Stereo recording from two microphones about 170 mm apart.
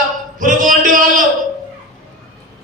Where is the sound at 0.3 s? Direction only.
50° right (ahead or behind).